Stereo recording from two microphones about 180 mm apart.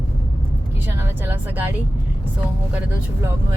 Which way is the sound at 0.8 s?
10° right (ahead or behind).